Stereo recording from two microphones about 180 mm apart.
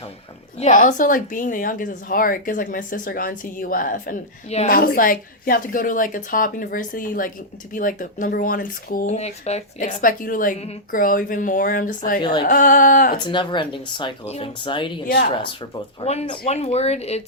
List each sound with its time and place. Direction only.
0.6 s speech: 45° left (ahead or behind)
13.1 s speech: 25° left (ahead or behind)
15.0 s speech: 60° left (ahead or behind)
16.0 s speech: 30° left (ahead or behind)